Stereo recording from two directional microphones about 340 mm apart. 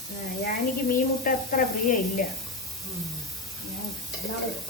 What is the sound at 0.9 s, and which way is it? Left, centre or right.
Speech, left.